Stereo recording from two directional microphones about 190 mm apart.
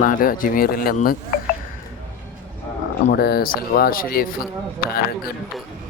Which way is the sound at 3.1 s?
55° left (ahead or behind).